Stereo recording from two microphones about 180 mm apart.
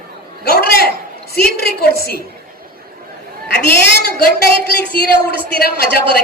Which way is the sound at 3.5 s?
70° left (ahead or behind).